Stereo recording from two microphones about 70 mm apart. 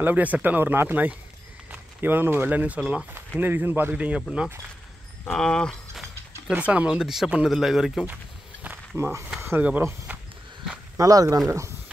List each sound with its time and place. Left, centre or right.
0.0 s speech: right
3.9 s speech: centre
5.3 s speech: centre
6.5 s a man's voice: centre
8.9 s speech: right
10.1 s walk: right
11.0 s speech: right